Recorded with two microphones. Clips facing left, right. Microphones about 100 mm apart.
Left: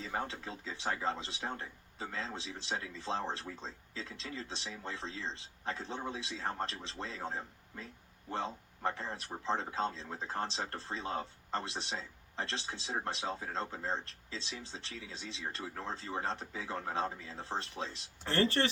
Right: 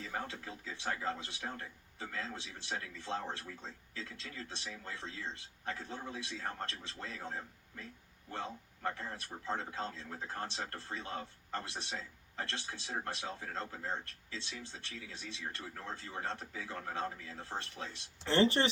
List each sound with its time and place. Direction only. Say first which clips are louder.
0.0 s a man's voice: left 3 dB; 30° left (ahead or behind)
18.3 s speech: right 2 dB; 20° right (ahead or behind)